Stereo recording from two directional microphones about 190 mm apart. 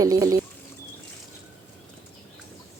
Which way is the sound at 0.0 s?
20° right (ahead or behind).